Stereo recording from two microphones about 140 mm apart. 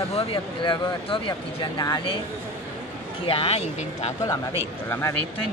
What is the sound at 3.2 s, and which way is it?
Speech, 40° left (ahead or behind).